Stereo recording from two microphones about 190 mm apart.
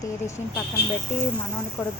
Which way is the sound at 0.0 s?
15° left (ahead or behind).